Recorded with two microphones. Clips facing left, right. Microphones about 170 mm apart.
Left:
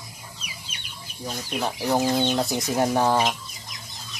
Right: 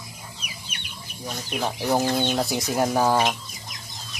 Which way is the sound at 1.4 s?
5° right (ahead or behind).